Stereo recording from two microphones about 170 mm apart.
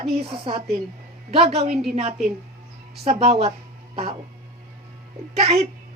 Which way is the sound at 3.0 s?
35° right (ahead or behind).